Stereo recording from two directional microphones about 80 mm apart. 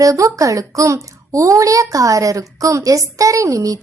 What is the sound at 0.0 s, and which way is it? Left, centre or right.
A woman's voice, right.